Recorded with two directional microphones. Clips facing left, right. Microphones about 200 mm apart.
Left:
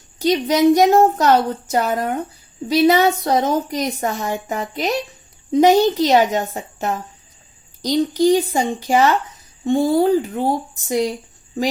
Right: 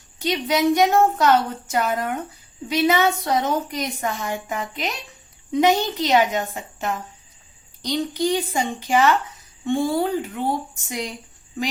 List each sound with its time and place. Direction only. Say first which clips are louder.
0.2 s a woman's voice: left 6 dB; 40° left (ahead or behind)